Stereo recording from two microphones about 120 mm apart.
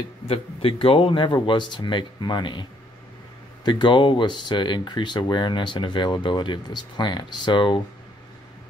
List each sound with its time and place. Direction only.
0.3 s speech: 50° left (ahead or behind)
3.6 s speech: 40° left (ahead or behind)